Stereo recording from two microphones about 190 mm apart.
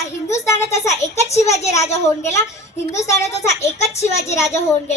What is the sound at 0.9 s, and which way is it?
Speech, 35° left (ahead or behind).